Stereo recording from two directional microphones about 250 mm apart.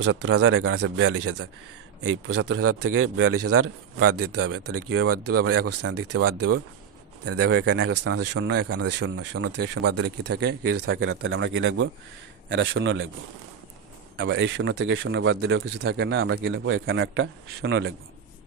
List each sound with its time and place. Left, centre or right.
0.0 s speech: right
2.0 s a man's voice: right
5.8 s speech: right
6.3 s speech: right
7.3 s speech: right
10.6 s speech: right
14.1 s speech: right